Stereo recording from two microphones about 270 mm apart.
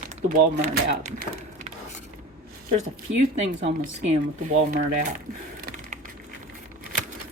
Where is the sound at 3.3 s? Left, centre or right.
Right.